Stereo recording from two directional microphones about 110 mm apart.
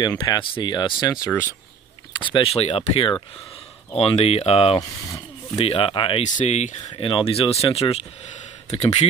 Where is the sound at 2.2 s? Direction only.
50° left (ahead or behind).